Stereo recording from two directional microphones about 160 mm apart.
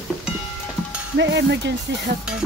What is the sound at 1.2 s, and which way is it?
Stir, 90° right.